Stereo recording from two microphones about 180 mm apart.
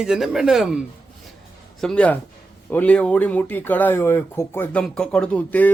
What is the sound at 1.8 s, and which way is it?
A man's voice, 5° left (ahead or behind).